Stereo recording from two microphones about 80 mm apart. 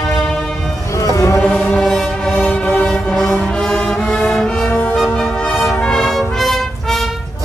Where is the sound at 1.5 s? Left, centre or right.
Centre.